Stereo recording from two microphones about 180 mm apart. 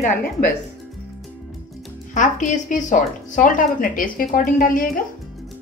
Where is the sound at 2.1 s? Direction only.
45° left (ahead or behind).